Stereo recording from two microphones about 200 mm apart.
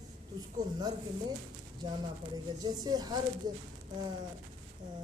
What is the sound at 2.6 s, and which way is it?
Speech, 20° right (ahead or behind).